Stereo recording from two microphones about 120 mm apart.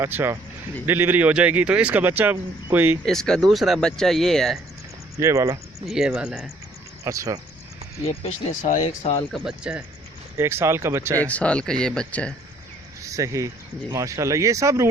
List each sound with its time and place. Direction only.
0.0 s speech: 20° right (ahead or behind)
3.1 s speech: 5° left (ahead or behind)
5.1 s speech: 30° right (ahead or behind)
5.9 s speech: 5° right (ahead or behind)
7.0 s speech: 25° right (ahead or behind)
8.0 s speech: 55° left (ahead or behind)
8.6 s speech: 75° left (ahead or behind)
9.3 s speech: 5° right (ahead or behind)
10.3 s speech: 20° right (ahead or behind)
11.3 s speech: 10° left (ahead or behind)
13.0 s speech: 25° right (ahead or behind)